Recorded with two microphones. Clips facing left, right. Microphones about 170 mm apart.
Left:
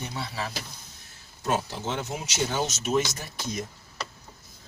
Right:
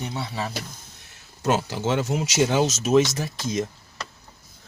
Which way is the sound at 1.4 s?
90° right.